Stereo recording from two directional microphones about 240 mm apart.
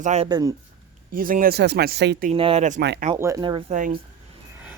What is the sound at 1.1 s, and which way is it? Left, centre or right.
Speech, right.